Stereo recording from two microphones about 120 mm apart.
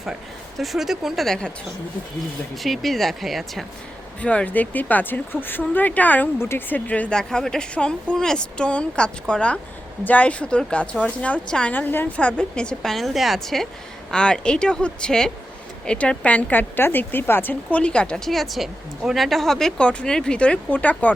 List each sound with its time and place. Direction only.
0.6 s speech: centre (ahead or behind)
2.6 s speech: centre (ahead or behind)
4.2 s speech: 10° left (ahead or behind)